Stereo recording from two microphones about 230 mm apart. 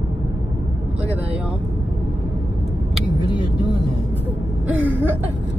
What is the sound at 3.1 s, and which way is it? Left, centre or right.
Vehicle, centre.